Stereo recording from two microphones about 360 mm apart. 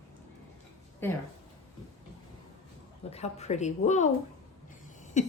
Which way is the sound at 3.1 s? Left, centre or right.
Centre.